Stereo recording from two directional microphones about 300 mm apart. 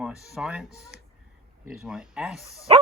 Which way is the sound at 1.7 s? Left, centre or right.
Centre.